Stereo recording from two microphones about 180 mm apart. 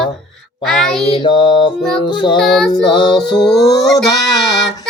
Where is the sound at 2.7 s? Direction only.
25° left (ahead or behind).